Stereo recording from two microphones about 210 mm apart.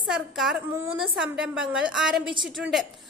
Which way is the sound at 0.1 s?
Centre (ahead or behind).